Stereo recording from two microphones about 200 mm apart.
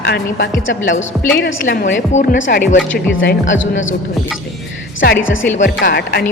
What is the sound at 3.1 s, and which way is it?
Speech, 70° left (ahead or behind).